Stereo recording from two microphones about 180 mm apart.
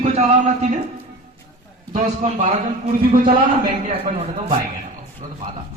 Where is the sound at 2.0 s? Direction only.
35° right (ahead or behind).